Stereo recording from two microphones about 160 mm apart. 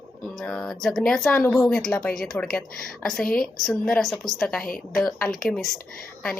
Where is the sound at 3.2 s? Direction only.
65° left (ahead or behind).